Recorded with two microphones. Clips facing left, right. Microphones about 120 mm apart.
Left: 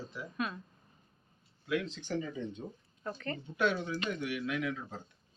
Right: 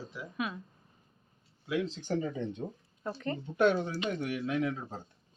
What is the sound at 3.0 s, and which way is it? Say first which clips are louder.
Speech: right 3 dB; 15° right (ahead or behind).